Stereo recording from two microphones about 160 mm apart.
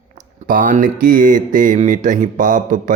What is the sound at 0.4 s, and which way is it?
Speech, 55° right (ahead or behind).